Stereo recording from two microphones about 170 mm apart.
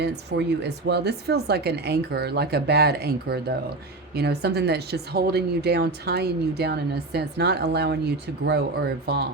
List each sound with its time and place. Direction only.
0.0 s speech: 80° right